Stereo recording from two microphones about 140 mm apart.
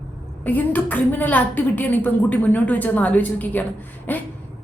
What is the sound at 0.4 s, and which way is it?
A woman's voice, 10° left (ahead or behind).